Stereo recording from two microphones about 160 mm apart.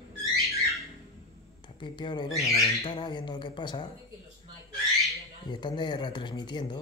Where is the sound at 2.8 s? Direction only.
30° left (ahead or behind).